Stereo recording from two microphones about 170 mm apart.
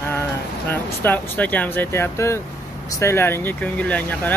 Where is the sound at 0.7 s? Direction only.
10° left (ahead or behind).